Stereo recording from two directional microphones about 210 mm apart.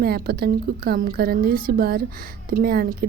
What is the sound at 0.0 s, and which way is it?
Speech, 45° right (ahead or behind).